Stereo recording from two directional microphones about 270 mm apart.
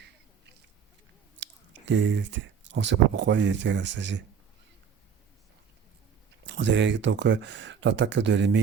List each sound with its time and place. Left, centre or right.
1.4 s speech: right
6.4 s speech: right